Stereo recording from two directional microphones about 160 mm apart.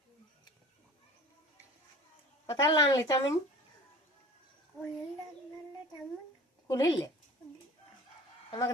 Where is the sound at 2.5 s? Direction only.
20° left (ahead or behind).